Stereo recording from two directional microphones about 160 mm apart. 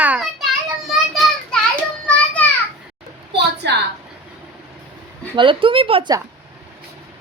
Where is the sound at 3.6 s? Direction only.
90° right.